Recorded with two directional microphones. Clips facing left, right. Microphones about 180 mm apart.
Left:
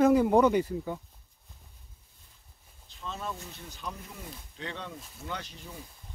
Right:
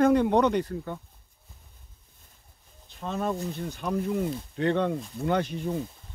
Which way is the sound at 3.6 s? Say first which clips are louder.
Right 13 dB; 55° right (ahead or behind).